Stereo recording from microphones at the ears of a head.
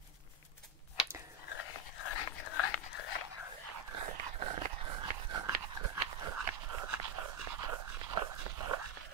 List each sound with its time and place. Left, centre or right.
1.4 s dog: left
3.7 s dog: right